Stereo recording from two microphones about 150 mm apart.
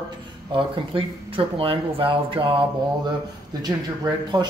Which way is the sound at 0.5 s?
35° right (ahead or behind).